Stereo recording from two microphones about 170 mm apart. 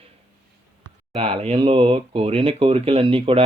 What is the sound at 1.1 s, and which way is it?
Speech, 35° right (ahead or behind).